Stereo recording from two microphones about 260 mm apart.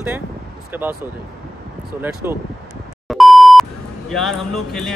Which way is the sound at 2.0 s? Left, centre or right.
Centre.